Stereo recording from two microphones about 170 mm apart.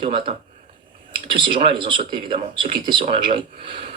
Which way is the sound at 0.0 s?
30° right (ahead or behind).